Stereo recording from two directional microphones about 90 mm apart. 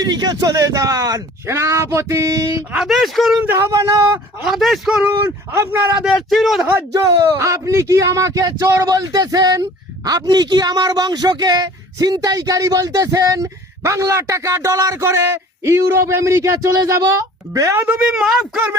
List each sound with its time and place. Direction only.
0.0 s speech: 50° right (ahead or behind)
2.7 s speech: centre (ahead or behind)
3.3 s speech: 20° right (ahead or behind)
3.6 s speech: 35° right (ahead or behind)
4.4 s speech: centre (ahead or behind)
4.9 s speech: 20° right (ahead or behind)
6.0 s a man's voice: 10° right (ahead or behind)
6.3 s speech: centre (ahead or behind)
6.9 s speech: 40° right (ahead or behind)
17.9 s speech: 10° right (ahead or behind)